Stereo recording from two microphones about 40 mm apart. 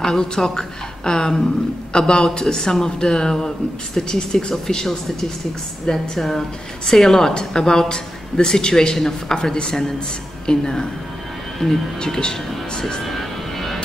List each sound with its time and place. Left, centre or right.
0.0 s speech: centre
13.0 s vehicle: centre